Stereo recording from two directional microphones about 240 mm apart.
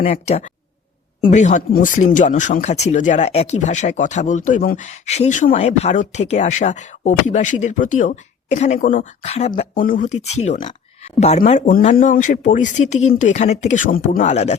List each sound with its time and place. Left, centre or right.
0.0 s speech: left